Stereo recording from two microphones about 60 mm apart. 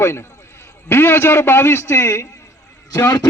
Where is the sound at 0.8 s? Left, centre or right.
Left.